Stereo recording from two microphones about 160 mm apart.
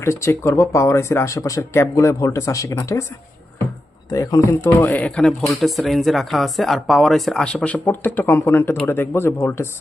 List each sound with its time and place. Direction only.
0.0 s speech: 15° left (ahead or behind)
4.1 s speech: 20° left (ahead or behind)